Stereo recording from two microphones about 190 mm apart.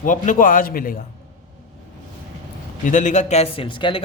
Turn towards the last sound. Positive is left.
turn(degrees=25)  # may be behind; listen again after turning